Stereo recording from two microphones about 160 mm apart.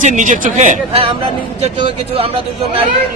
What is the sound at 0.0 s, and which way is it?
A man's voice, 50° right (ahead or behind).